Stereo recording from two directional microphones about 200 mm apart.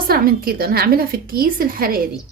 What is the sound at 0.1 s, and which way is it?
A woman's voice, 45° right (ahead or behind).